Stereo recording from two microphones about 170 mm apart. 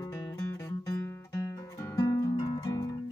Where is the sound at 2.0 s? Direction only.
20° left (ahead or behind).